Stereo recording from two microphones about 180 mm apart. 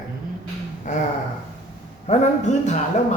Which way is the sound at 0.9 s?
45° left (ahead or behind).